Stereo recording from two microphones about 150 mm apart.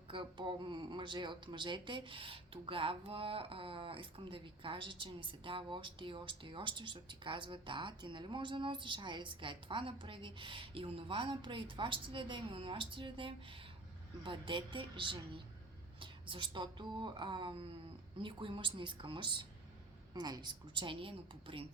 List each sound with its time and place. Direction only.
0.1 s speech: 35° right (ahead or behind)